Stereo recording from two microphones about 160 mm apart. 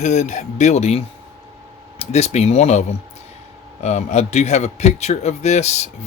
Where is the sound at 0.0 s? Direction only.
50° left (ahead or behind).